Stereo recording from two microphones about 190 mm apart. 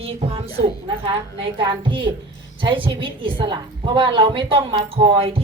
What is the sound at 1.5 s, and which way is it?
A woman's voice, 25° right (ahead or behind).